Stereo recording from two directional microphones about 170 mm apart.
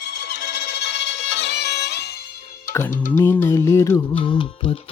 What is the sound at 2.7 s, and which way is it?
Music, 15° left (ahead or behind).